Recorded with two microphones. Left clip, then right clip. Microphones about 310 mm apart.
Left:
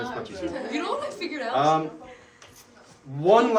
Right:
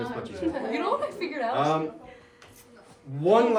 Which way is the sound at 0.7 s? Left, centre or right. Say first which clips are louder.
Right 1 dB; right.